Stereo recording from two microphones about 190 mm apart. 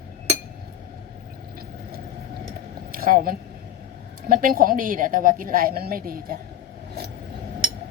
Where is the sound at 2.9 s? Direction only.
50° right (ahead or behind).